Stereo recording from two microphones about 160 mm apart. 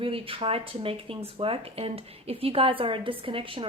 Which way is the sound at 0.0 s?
35° right (ahead or behind).